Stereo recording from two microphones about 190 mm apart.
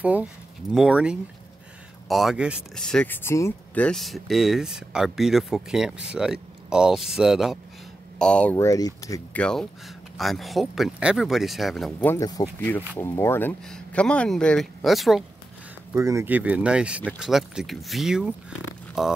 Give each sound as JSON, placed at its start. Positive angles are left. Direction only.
{"t": 0.0, "sound": "speech", "side_deg": -5}
{"t": 9.4, "sound": "speech", "side_deg": 5}
{"t": 15.9, "sound": "speech", "side_deg": -15}